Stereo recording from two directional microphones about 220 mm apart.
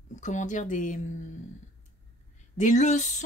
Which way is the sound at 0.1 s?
35° left (ahead or behind).